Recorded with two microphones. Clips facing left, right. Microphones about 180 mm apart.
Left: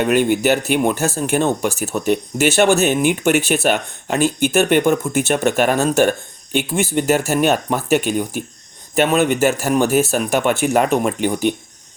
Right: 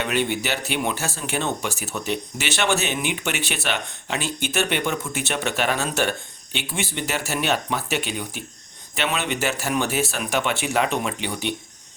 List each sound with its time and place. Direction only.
0.0 s speech: 45° left (ahead or behind)